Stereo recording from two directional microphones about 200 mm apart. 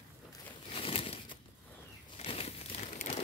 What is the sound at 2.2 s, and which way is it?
Crumpling, 30° left (ahead or behind).